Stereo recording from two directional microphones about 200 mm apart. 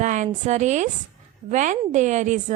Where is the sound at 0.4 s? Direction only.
35° right (ahead or behind).